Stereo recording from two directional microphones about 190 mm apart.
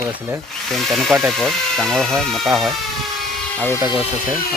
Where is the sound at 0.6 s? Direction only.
Centre (ahead or behind).